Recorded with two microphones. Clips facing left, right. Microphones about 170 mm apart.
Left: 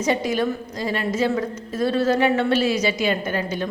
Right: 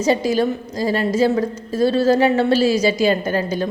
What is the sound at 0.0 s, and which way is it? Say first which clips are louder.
A woman's voice: right 4 dB; 35° right (ahead or behind).